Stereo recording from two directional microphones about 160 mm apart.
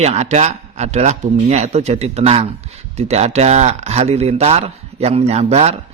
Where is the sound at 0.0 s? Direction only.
45° right (ahead or behind).